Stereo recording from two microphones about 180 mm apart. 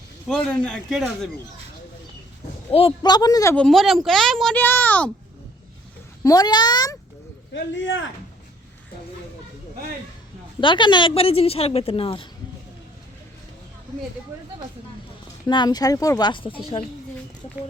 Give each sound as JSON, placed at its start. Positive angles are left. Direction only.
{"t": 0.3, "sound": "a woman's voice", "side_deg": 5}
{"t": 2.7, "sound": "speech", "side_deg": 25}
{"t": 3.5, "sound": "a woman's voice", "side_deg": 5}
{"t": 6.2, "sound": "speech", "side_deg": 20}
{"t": 7.5, "sound": "speech", "side_deg": 90}
{"t": 10.6, "sound": "a woman's voice", "side_deg": 25}
{"t": 15.4, "sound": "speech", "side_deg": 25}